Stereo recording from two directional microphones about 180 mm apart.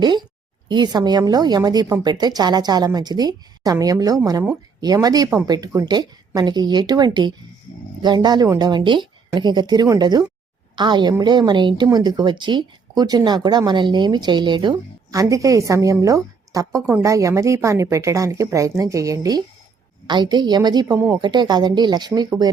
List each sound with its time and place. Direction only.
0.0 s a woman's voice: 25° right (ahead or behind)
20.8 s speech: 10° right (ahead or behind)
21.2 s a woman's voice: 25° right (ahead or behind)